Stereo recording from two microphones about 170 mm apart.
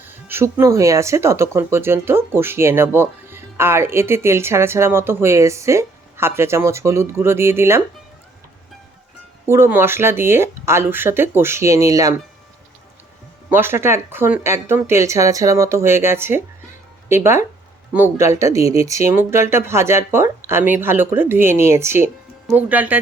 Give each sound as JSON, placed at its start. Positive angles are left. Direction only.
{"t": 0.1, "sound": "speech", "side_deg": -15}
{"t": 9.5, "sound": "speech", "side_deg": -15}
{"t": 13.5, "sound": "speech", "side_deg": -15}